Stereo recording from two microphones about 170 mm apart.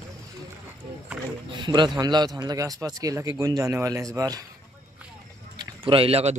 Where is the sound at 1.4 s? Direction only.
25° right (ahead or behind).